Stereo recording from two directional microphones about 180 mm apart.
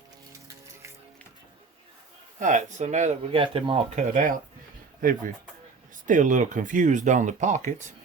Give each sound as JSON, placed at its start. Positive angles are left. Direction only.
{"t": 2.4, "sound": "speech", "side_deg": -45}
{"t": 3.4, "sound": "speech", "side_deg": -30}
{"t": 3.9, "sound": "speech", "side_deg": -45}